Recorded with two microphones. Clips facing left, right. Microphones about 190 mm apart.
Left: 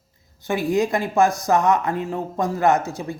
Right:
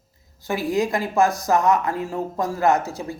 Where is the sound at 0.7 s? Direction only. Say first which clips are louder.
Left 1 dB; 20° left (ahead or behind).